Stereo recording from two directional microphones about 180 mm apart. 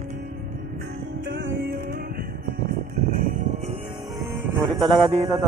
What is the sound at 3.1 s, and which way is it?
Music, 50° right (ahead or behind).